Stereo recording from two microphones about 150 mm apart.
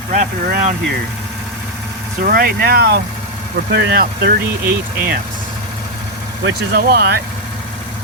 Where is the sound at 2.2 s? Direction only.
75° right (ahead or behind).